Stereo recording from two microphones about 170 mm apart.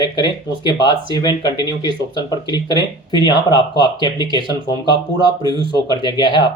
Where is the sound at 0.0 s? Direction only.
25° left (ahead or behind).